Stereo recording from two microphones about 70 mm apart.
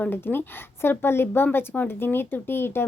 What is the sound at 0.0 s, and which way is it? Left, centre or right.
A woman's voice, left.